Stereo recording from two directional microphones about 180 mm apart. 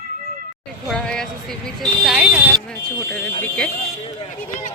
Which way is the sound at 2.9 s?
10° left (ahead or behind).